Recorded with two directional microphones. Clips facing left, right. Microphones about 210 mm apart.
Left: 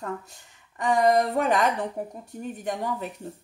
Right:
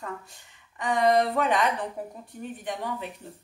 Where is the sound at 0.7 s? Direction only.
45° left (ahead or behind).